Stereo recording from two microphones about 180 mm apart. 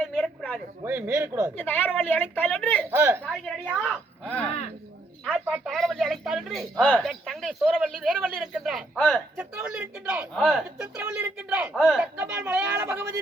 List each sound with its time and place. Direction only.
0.0 s a sound: centre (ahead or behind)
0.9 s speech: 15° right (ahead or behind)
1.5 s speech: 10° left (ahead or behind)
2.9 s speech: 15° right (ahead or behind)
3.2 s a man's voice: centre (ahead or behind)
12.1 s speech: 10° right (ahead or behind)